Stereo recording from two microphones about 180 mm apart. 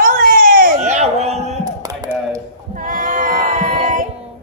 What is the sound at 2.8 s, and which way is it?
Sheep, 45° right (ahead or behind).